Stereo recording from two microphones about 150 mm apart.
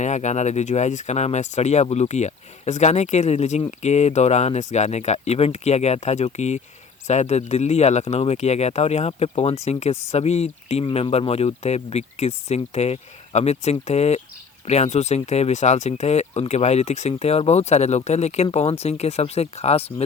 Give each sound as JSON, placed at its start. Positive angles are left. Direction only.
{"t": 0.0, "sound": "speech", "side_deg": 50}